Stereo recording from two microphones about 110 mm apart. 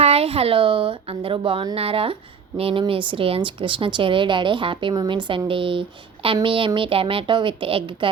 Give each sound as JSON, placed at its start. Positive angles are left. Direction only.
{"t": 0.0, "sound": "speech", "side_deg": -65}